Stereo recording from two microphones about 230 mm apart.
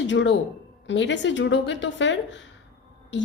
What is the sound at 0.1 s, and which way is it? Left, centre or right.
A woman's voice, left.